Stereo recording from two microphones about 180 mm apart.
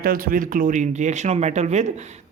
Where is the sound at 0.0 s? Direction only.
50° right (ahead or behind).